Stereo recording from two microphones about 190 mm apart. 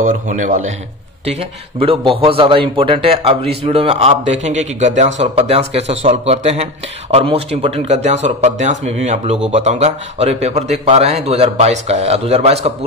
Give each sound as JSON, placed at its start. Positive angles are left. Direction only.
{"t": 0.0, "sound": "a man's voice", "side_deg": -45}
{"t": 1.8, "sound": "a man's voice", "side_deg": -30}